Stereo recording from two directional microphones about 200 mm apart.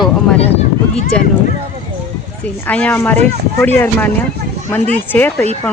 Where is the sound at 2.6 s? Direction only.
10° left (ahead or behind).